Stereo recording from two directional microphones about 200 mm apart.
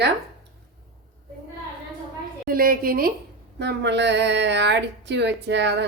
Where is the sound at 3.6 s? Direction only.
60° right (ahead or behind).